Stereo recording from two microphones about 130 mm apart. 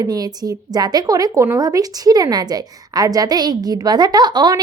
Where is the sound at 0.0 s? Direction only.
30° right (ahead or behind).